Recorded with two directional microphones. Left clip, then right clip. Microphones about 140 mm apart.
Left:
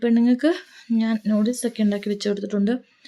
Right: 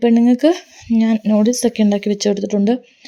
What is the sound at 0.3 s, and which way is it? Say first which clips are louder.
Speech: right 6 dB; 40° right (ahead or behind).